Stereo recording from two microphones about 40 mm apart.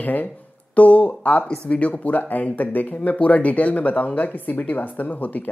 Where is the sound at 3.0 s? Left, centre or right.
Left.